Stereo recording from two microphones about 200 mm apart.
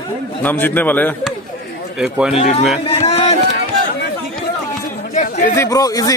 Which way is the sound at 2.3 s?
30° left (ahead or behind).